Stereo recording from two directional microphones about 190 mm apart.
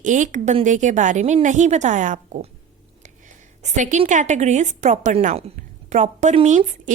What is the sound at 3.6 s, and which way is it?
A woman's voice, 40° right (ahead or behind).